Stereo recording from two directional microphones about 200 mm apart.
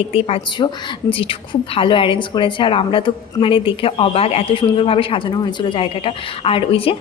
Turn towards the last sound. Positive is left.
turn(degrees=25)  # may be behind; listen again after turning